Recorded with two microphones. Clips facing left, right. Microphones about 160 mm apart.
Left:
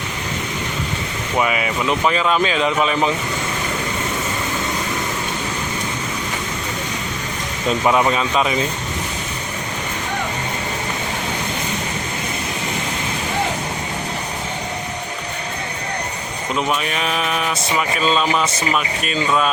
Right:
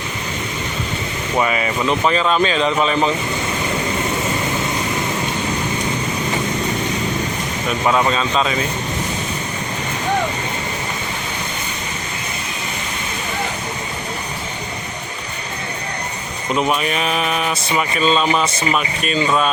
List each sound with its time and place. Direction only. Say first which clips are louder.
1.4 s speech: right 1 dB; 5° left (ahead or behind)
7.7 s speech: left 1 dB; 15° left (ahead or behind)
16.6 s speech: right 3 dB; 5° right (ahead or behind)